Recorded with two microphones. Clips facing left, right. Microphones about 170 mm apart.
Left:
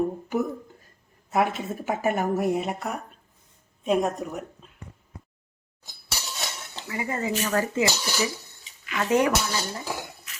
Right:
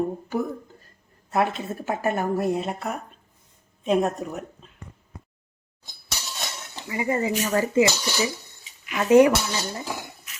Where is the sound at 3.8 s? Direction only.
Centre (ahead or behind).